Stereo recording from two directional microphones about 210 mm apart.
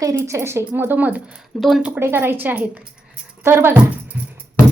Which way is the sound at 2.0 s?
10° right (ahead or behind).